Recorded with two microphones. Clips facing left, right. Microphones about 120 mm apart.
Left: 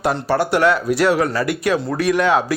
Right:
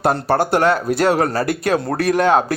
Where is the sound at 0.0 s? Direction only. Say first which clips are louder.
Right 2 dB; 45° right (ahead or behind).